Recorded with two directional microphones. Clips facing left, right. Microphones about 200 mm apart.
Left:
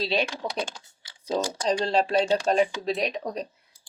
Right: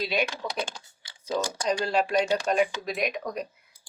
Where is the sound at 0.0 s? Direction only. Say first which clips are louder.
Left 2 dB; 30° left (ahead or behind).